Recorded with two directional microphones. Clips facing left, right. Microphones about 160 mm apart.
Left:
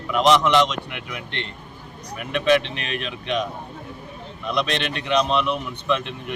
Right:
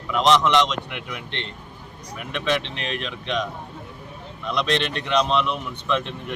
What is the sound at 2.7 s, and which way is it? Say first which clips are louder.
Speech: even; 55° left (ahead or behind).